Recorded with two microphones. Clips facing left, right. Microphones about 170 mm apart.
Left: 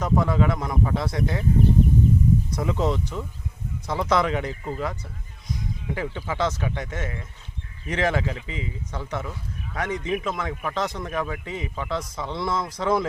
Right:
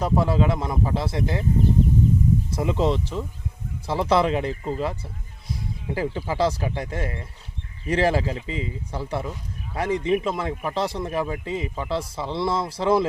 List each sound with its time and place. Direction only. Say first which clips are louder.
0.0 s speech: right 1 dB; 30° right (ahead or behind)
2.5 s speech: right 2 dB; 25° right (ahead or behind)